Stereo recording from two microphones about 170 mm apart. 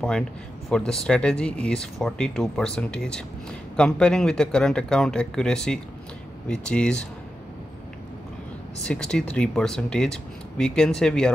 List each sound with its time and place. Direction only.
0.7 s speech: 5° left (ahead or behind)
8.8 s speech: 5° left (ahead or behind)